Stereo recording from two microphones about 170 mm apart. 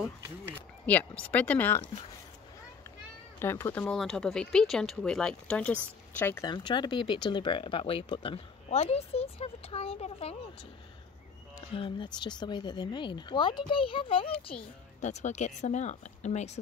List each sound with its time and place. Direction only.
0.8 s speech: 10° left (ahead or behind)
3.3 s speech: 15° left (ahead or behind)
6.4 s speech: 25° left (ahead or behind)
11.7 s speech: 30° left (ahead or behind)
15.0 s speech: 45° left (ahead or behind)